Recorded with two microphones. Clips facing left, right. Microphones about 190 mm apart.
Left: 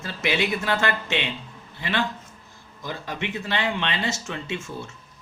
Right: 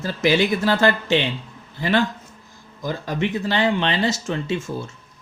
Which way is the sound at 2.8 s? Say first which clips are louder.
Right 7 dB; 40° right (ahead or behind).